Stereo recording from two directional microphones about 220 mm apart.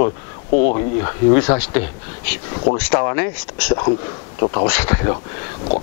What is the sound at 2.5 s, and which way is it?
Speech, 30° left (ahead or behind).